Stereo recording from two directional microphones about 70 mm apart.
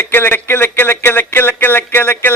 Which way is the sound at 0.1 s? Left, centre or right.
Left.